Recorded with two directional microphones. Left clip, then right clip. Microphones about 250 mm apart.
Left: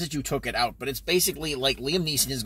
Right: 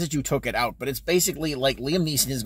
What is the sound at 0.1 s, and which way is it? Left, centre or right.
Speech, centre.